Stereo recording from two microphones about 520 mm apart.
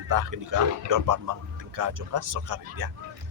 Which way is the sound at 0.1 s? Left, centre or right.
Right.